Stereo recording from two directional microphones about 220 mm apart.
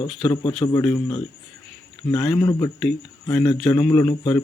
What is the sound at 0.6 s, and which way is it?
Speech, 15° left (ahead or behind).